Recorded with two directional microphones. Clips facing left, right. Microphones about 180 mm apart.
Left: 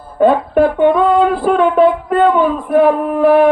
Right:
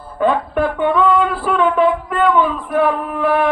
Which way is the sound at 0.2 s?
40° left (ahead or behind).